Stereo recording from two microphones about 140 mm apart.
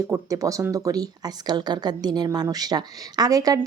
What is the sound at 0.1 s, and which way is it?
A woman's voice, 25° right (ahead or behind).